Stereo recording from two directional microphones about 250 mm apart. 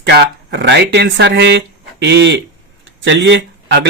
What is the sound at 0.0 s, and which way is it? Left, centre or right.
Speech, right.